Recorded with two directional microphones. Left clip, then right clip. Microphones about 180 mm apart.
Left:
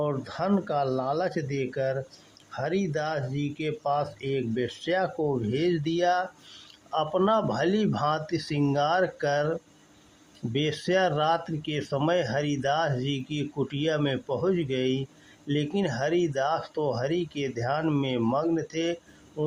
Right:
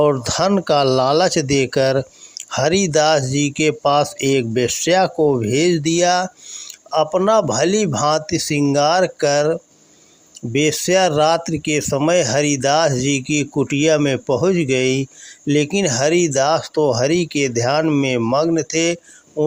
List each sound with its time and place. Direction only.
0.0 s speech: 50° right (ahead or behind)